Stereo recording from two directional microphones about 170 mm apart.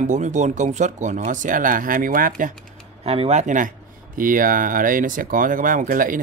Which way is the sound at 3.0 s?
40° right (ahead or behind).